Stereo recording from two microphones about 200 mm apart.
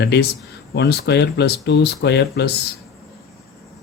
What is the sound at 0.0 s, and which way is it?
Speech, 55° left (ahead or behind).